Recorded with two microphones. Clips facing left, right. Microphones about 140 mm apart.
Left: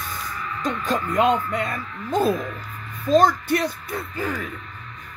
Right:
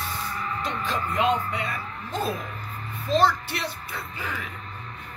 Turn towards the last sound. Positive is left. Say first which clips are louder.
# left 7 dB
turn(degrees=40)  # may be behind; listen again after turning